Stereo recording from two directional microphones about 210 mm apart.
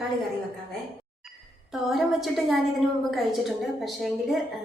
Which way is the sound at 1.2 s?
Centre (ahead or behind).